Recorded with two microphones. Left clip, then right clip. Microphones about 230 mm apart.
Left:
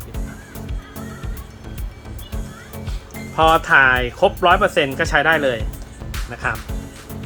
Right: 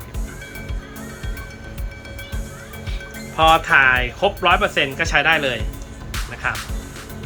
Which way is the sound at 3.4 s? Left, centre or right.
Left.